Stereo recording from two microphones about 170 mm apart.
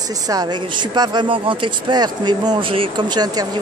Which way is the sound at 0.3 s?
25° right (ahead or behind).